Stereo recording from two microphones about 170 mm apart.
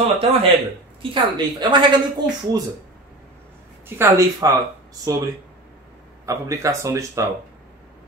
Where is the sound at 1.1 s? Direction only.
25° right (ahead or behind).